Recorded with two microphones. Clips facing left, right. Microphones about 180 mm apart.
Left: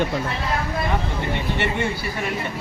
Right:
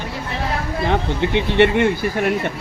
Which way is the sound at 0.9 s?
90° right.